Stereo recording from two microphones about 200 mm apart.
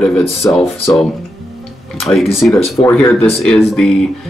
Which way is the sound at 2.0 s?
Centre (ahead or behind).